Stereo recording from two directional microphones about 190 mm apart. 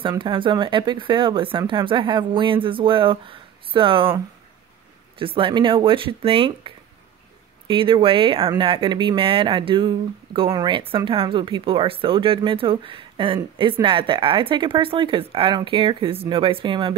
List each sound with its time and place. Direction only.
0.0 s speech: 25° right (ahead or behind)
5.2 s speech: 25° right (ahead or behind)